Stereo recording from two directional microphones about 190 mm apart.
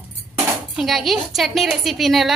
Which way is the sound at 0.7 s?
Centre (ahead or behind).